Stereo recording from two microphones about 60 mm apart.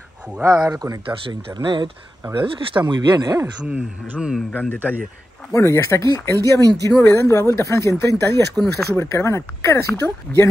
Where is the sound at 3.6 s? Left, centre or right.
Right.